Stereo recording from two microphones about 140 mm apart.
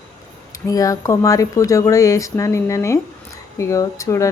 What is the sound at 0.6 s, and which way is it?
Speech, 25° left (ahead or behind).